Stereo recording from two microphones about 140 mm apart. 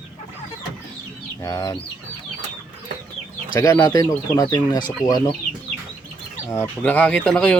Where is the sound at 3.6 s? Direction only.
20° left (ahead or behind).